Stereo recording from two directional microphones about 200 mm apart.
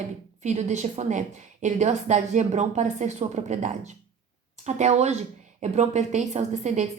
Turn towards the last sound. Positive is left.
turn(degrees=-35)  # may be behind; listen again after turning